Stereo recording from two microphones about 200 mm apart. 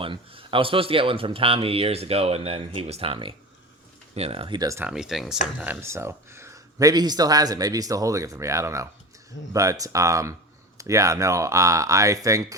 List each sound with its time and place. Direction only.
0.0 s speech: 25° right (ahead or behind)
4.9 s speech: centre (ahead or behind)